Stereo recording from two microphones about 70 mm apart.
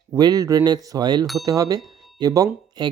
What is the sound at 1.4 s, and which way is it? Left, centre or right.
Speech, right.